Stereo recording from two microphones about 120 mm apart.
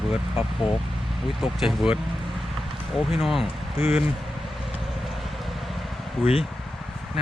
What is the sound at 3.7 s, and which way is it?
Speech, 60° left (ahead or behind).